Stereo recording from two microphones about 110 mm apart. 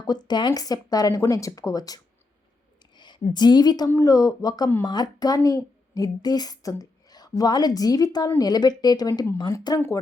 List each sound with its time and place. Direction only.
0.0 s speech: 40° left (ahead or behind)
3.0 s a woman's voice: 40° left (ahead or behind)